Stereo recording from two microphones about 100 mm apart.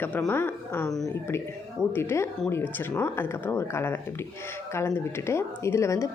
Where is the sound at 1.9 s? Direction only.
25° left (ahead or behind).